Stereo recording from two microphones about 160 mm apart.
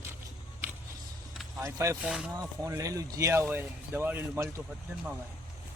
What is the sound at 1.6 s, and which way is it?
Speech, 20° right (ahead or behind).